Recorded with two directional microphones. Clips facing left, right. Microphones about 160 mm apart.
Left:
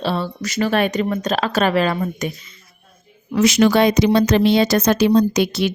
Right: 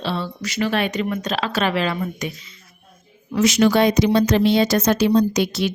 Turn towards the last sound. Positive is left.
turn(degrees=65)  # may be behind; listen again after turning